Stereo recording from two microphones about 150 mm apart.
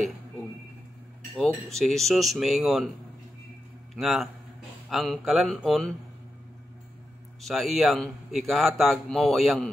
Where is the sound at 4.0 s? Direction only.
Centre (ahead or behind).